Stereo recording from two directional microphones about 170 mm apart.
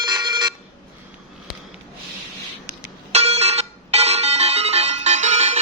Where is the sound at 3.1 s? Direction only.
40° right (ahead or behind).